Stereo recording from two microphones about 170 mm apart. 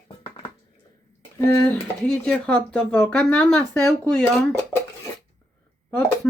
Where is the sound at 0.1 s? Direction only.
30° left (ahead or behind).